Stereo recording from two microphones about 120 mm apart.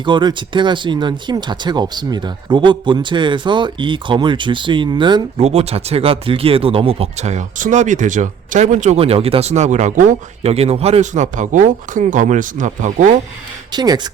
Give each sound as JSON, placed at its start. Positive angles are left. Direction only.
{"t": 0.0, "sound": "speech", "side_deg": -40}
{"t": 5.4, "sound": "speech", "side_deg": -60}
{"t": 9.0, "sound": "speech", "side_deg": -55}
{"t": 13.7, "sound": "speech", "side_deg": -35}